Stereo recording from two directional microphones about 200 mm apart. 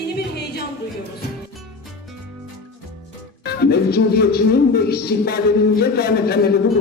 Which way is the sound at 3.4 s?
50° left (ahead or behind).